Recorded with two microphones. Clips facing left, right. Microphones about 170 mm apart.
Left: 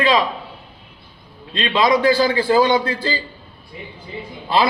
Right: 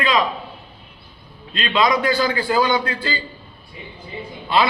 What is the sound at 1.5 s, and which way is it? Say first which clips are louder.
A man's voice: left 2 dB; 25° left (ahead or behind).